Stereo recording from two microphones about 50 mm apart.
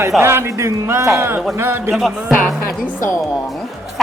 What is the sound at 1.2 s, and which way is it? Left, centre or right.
Speech, right.